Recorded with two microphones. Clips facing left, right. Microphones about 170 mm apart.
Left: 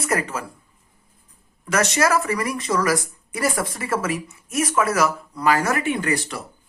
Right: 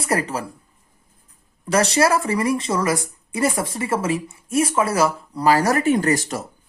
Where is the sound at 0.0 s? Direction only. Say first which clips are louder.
Right 2 dB; 35° right (ahead or behind).